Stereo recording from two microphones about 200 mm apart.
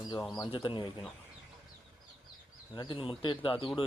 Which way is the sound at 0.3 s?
25° left (ahead or behind).